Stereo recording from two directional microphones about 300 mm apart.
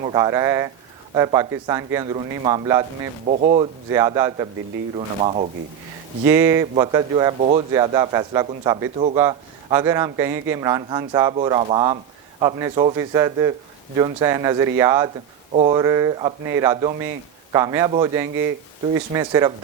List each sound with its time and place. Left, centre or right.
0.0 s speech: centre
3.2 s speech: right
3.9 s speech: centre
6.2 s speech: centre